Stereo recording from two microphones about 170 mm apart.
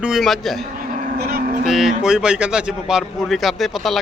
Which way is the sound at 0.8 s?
60° right (ahead or behind).